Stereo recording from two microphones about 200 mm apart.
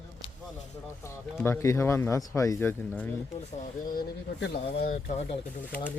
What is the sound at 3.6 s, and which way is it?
Speech, 45° left (ahead or behind).